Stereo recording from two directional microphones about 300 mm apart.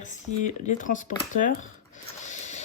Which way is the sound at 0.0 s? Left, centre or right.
Left.